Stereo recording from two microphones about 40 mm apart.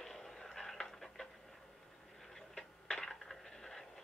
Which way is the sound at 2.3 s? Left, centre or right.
Centre.